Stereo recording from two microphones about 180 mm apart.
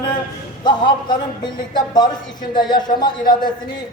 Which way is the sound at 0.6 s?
25° left (ahead or behind).